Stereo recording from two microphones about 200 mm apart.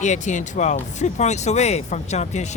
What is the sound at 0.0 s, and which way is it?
Speech, 35° left (ahead or behind).